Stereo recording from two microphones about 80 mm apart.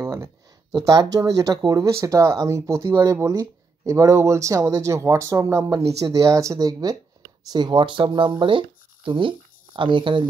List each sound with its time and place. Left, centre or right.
0.0 s a sound: right
0.8 s speech: right
7.5 s speech: right